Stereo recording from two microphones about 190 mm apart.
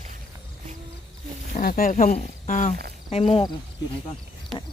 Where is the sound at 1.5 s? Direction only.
50° left (ahead or behind); by 3.5 s 30° left (ahead or behind).